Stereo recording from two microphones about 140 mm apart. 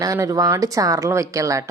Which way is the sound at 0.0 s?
25° right (ahead or behind).